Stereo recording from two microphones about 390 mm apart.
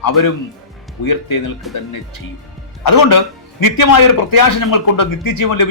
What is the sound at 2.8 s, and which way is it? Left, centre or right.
A man's voice, left.